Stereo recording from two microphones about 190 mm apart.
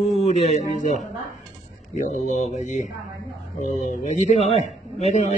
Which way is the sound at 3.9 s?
35° left (ahead or behind).